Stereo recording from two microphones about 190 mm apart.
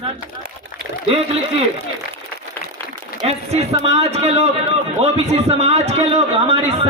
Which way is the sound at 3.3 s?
35° right (ahead or behind).